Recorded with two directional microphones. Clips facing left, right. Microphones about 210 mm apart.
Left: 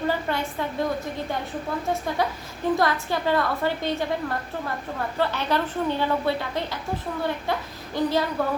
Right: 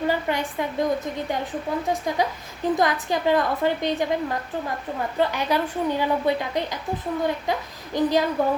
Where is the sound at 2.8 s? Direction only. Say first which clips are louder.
Right 1 dB; 15° right (ahead or behind).